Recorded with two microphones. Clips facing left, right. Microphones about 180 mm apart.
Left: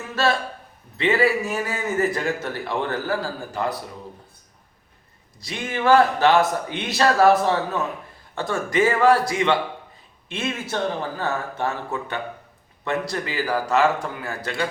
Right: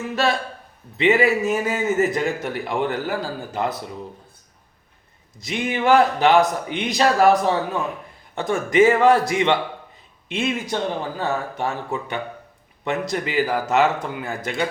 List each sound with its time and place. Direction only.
0.9 s a man's voice: 20° right (ahead or behind)
5.4 s a man's voice: 20° right (ahead or behind)